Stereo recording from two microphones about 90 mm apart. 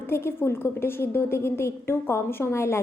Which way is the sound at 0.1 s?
25° left (ahead or behind).